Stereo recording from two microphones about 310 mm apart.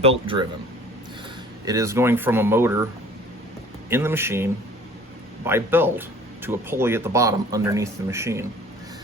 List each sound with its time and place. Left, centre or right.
0.0 s speech: centre
1.6 s speech: centre
3.8 s speech: centre
5.5 s speech: centre